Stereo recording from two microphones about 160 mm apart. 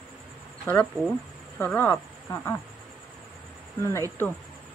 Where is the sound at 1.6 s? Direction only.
10° left (ahead or behind).